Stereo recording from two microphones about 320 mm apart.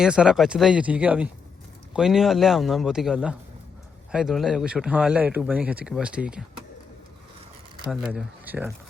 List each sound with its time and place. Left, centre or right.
0.0 s speech: centre
7.9 s speech: centre